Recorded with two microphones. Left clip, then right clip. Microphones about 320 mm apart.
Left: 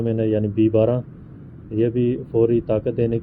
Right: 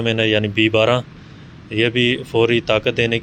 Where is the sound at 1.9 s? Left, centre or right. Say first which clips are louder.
Right 4 dB; centre.